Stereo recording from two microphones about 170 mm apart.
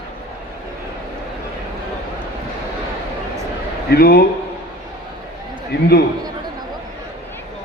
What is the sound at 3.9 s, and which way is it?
Speech, 65° left (ahead or behind).